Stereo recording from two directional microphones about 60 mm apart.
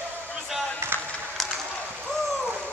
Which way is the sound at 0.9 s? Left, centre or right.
Right.